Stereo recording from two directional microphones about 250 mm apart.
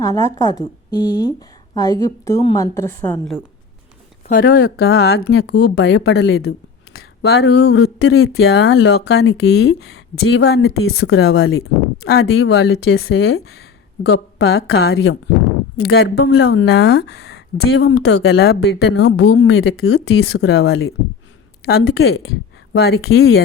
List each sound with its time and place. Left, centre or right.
0.0 s a woman's voice: centre
4.3 s speech: left
9.7 s speech: left
14.0 s speech: left
21.7 s speech: left